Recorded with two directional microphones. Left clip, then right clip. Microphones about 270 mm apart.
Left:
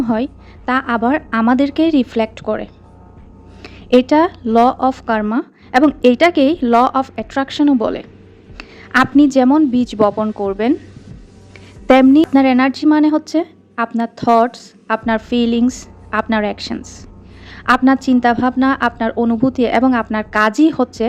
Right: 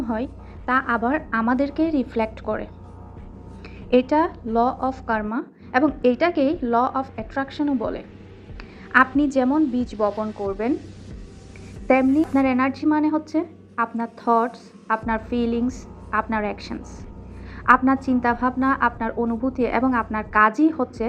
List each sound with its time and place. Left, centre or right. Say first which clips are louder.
0.0 s a woman's voice: left 8 dB; left
12.1 s a woman's voice: left 8 dB; left